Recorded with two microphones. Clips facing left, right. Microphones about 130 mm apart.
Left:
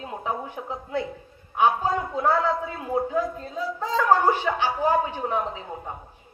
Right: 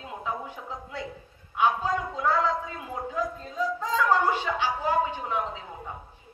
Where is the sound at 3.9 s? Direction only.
45° left (ahead or behind).